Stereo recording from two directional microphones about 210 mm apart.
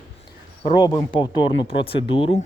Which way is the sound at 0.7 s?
20° left (ahead or behind).